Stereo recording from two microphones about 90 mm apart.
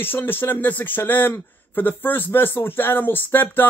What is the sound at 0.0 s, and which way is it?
Speech, 25° left (ahead or behind).